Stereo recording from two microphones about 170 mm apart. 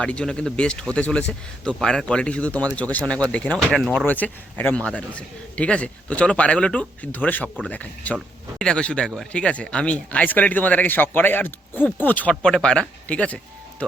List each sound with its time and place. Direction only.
0.0 s speech: 5° left (ahead or behind)